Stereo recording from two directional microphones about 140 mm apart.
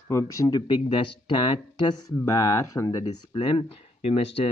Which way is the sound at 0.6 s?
35° left (ahead or behind).